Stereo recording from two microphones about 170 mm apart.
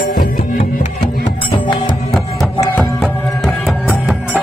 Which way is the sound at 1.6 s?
30° left (ahead or behind).